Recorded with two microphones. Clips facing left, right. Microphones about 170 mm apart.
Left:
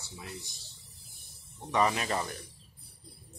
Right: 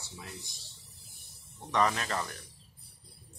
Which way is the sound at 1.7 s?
10° left (ahead or behind).